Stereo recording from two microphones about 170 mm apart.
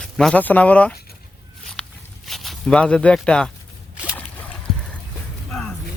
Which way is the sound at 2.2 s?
Centre (ahead or behind).